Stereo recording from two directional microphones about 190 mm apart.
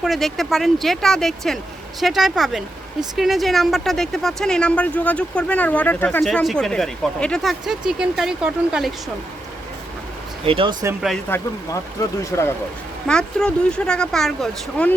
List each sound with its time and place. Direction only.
0.0 s speech: centre (ahead or behind)
10.4 s speech: 30° right (ahead or behind)
11.3 s speech: 10° left (ahead or behind)
13.1 s speech: 5° left (ahead or behind)